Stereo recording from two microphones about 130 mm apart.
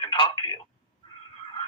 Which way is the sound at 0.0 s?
35° left (ahead or behind).